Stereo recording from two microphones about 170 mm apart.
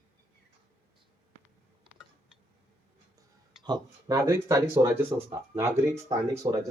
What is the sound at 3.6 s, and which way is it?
Speech, 25° right (ahead or behind).